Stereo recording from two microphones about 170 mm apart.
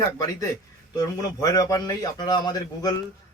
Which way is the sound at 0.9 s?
20° left (ahead or behind).